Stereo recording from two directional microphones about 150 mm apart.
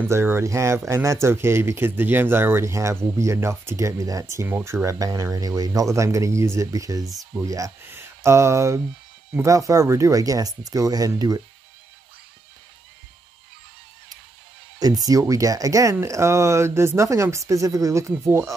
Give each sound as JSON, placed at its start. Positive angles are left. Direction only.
{"t": 0.1, "sound": "speech", "side_deg": -15}
{"t": 14.8, "sound": "speech", "side_deg": -25}